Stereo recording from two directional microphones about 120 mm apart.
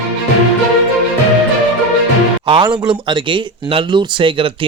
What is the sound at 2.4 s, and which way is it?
Speech, 45° right (ahead or behind).